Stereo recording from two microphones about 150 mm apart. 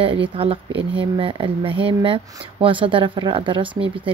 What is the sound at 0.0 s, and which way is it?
Speech, 35° right (ahead or behind).